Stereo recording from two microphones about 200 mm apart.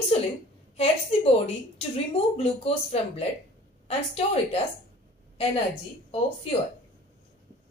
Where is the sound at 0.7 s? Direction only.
30° left (ahead or behind).